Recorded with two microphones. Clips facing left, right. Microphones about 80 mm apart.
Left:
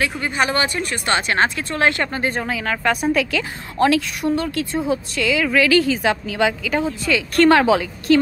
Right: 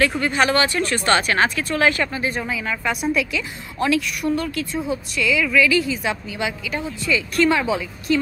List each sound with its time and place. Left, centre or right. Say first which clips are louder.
0.0 s speech: right 2 dB; centre
2.1 s a woman's voice: left 2 dB; left
3.0 s a woman's voice: left 3 dB; left
4.2 s speech: left 2 dB; left
5.3 s a woman's voice: left 2 dB; left